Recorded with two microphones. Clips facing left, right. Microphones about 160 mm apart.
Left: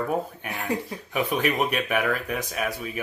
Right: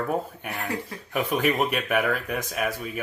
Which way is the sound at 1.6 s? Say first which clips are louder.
Even; 10° left (ahead or behind).